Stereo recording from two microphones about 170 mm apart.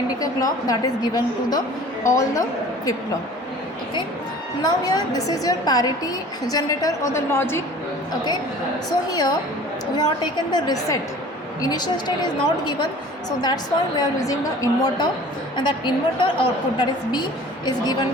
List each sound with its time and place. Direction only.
0.2 s a woman's voice: 20° left (ahead or behind)
4.6 s a woman's voice: 20° left (ahead or behind)
8.9 s a woman's voice: 20° left (ahead or behind)
10.5 s a woman's voice: 20° left (ahead or behind)